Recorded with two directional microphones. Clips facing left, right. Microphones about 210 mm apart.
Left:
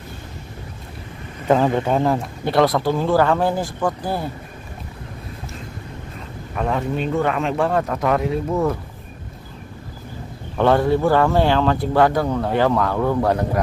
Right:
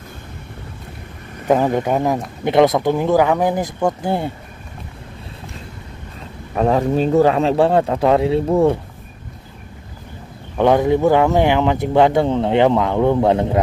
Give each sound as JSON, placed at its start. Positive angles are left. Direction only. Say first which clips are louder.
{"t": 1.5, "sound": "speech", "louder": "right 1 dB", "side_deg": -15}
{"t": 6.5, "sound": "speech", "louder": "right 6 dB", "side_deg": -35}
{"t": 10.6, "sound": "speech", "louder": "right 3 dB", "side_deg": -15}